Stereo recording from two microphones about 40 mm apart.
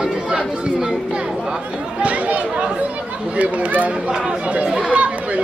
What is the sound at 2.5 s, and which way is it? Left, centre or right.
Speech, right.